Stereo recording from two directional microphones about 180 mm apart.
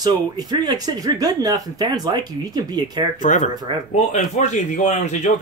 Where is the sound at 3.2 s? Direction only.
45° left (ahead or behind).